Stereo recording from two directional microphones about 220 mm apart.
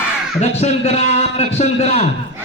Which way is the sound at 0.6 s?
30° left (ahead or behind).